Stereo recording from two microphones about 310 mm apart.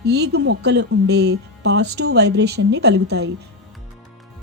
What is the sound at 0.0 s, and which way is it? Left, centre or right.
Speech, right.